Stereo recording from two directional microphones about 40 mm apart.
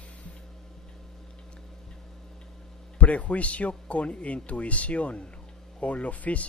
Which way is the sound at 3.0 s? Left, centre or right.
Left.